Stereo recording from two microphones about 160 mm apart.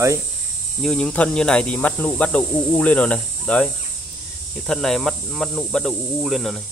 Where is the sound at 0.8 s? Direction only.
5° left (ahead or behind).